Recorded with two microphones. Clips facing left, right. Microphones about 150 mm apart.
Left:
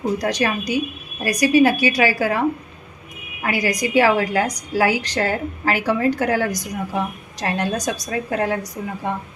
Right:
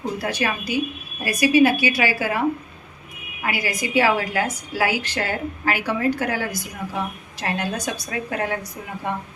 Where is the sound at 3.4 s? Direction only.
45° left (ahead or behind).